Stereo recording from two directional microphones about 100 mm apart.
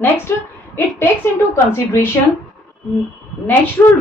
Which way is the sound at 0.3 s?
25° left (ahead or behind).